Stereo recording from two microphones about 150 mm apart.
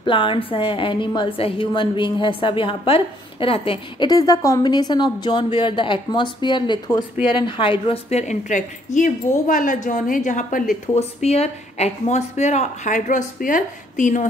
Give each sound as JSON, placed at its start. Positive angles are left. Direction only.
{"t": 0.0, "sound": "a woman's voice", "side_deg": 35}
{"t": 11.0, "sound": "a woman's voice", "side_deg": 45}